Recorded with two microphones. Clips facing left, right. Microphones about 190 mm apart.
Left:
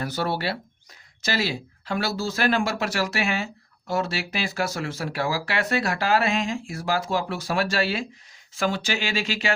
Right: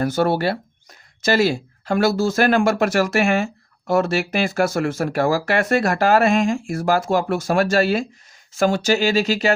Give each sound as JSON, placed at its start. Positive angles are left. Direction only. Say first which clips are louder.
{"t": 0.0, "sound": "speech", "louder": "right 8 dB", "side_deg": -50}